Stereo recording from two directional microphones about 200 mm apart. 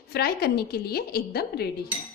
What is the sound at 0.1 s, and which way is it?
A woman's voice, 50° left (ahead or behind).